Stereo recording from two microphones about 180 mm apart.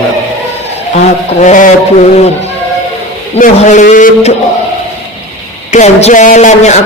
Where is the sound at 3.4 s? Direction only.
45° left (ahead or behind).